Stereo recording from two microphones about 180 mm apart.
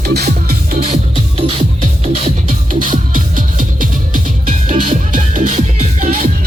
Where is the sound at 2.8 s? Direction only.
50° right (ahead or behind).